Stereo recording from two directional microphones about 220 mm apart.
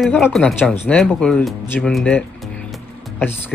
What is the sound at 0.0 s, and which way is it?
Speech, centre (ahead or behind).